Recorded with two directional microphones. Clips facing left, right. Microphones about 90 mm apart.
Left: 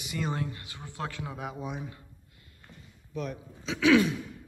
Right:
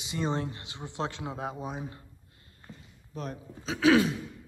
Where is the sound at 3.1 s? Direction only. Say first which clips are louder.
Left 2 dB; 35° right (ahead or behind).